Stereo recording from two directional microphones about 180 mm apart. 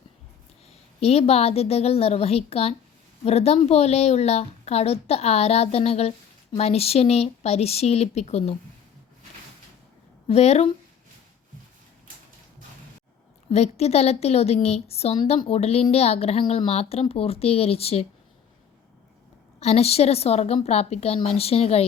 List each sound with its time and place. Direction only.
0.9 s a woman's voice: 35° left (ahead or behind)
10.2 s a woman's voice: 35° left (ahead or behind)
13.5 s a woman's voice: 35° left (ahead or behind)
19.5 s a woman's voice: 35° left (ahead or behind)